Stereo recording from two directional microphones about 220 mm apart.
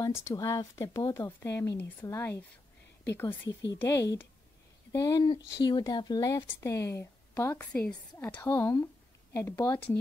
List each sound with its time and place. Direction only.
0.0 s speech: 15° left (ahead or behind)